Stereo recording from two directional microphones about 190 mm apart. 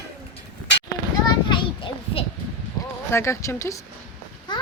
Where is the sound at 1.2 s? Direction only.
25° left (ahead or behind).